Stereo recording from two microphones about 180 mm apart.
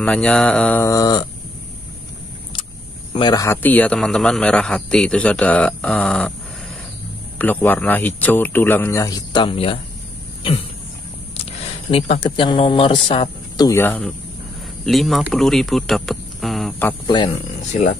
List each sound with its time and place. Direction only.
0.0 s a man's voice: 5° left (ahead or behind)
3.2 s a man's voice: 20° left (ahead or behind); by 6.3 s 5° left (ahead or behind)
7.3 s a man's voice: 10° left (ahead or behind); by 9.8 s 30° left (ahead or behind)
11.9 s speech: 30° left (ahead or behind)
13.7 s a man's voice: 10° left (ahead or behind)
17.7 s speech: 40° left (ahead or behind)